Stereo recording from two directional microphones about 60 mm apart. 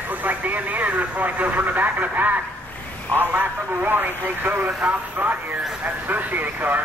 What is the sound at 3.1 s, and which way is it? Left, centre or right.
Speech, right.